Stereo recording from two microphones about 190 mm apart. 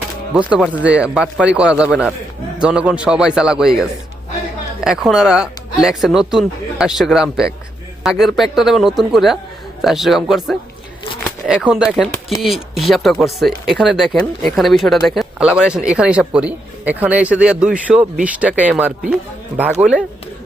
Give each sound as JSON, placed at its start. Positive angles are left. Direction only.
{"t": 0.3, "sound": "speech", "side_deg": -5}